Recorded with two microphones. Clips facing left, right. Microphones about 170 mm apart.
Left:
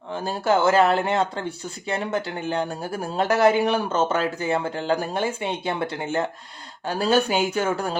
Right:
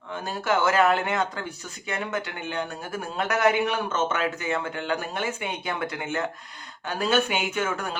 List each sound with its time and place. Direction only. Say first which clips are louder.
0.1 s speech: left 4 dB; 30° left (ahead or behind)